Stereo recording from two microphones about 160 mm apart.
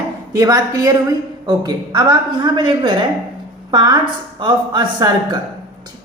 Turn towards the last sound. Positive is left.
turn(degrees=-25)  # may be behind; listen again after turning